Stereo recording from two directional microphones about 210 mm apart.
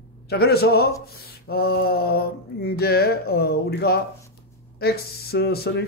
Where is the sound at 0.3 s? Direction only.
50° left (ahead or behind).